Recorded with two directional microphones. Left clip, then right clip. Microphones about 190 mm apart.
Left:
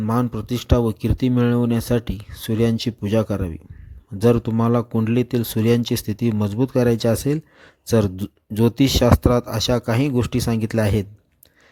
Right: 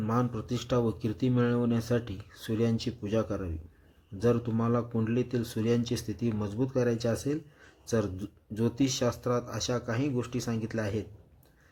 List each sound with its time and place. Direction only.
0.0 s speech: 45° left (ahead or behind)